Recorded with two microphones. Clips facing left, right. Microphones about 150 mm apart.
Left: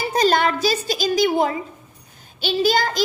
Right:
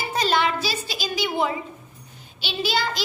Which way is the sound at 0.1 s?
45° left (ahead or behind).